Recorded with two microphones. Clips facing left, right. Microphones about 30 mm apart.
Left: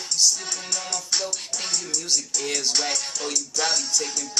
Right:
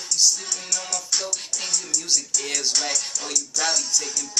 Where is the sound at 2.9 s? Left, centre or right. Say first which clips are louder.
Even; left.